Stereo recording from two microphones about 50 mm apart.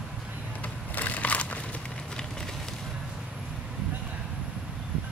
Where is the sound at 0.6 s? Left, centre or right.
Left.